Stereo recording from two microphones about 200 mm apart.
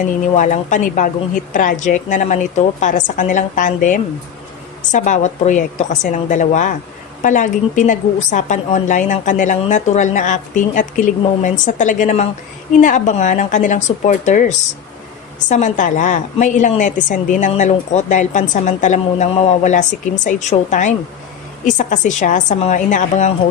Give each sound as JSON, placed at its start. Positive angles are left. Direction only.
{"t": 0.0, "sound": "a woman's voice", "side_deg": 40}